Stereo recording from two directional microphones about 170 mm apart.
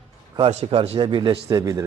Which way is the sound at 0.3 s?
35° right (ahead or behind).